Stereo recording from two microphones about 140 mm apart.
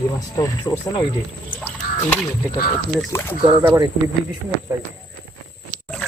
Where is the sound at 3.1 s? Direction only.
20° left (ahead or behind).